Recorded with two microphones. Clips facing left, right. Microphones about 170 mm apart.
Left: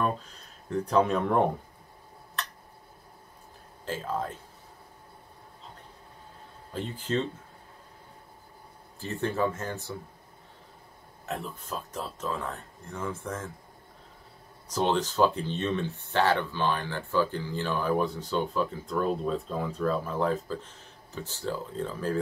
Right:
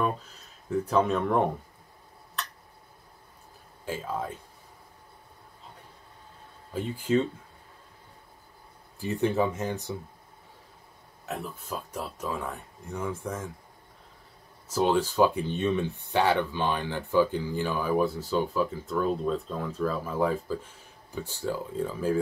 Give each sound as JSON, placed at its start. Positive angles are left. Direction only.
{"t": 0.0, "sound": "speech", "side_deg": -5}
{"t": 3.8, "sound": "speech", "side_deg": -10}
{"t": 6.7, "sound": "speech", "side_deg": -10}
{"t": 9.0, "sound": "speech", "side_deg": -15}
{"t": 11.2, "sound": "speech", "side_deg": -5}
{"t": 14.7, "sound": "speech", "side_deg": -5}